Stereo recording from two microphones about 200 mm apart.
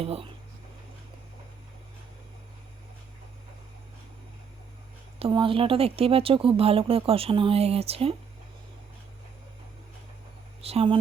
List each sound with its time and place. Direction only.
0.0 s speech: 30° right (ahead or behind)
5.2 s speech: 25° right (ahead or behind)
10.6 s speech: 30° right (ahead or behind)